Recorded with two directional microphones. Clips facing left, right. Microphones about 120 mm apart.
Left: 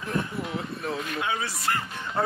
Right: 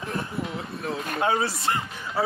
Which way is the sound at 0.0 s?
Centre (ahead or behind).